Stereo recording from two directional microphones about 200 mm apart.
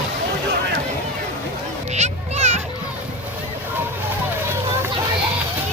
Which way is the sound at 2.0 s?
35° right (ahead or behind).